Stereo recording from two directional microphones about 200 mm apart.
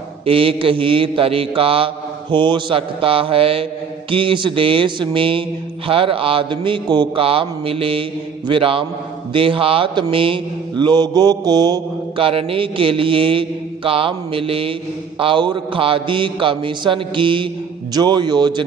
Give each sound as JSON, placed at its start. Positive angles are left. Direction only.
{"t": 0.2, "sound": "mantra", "side_deg": -25}